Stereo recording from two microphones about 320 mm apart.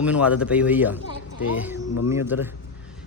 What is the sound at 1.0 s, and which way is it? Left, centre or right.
Speech, left.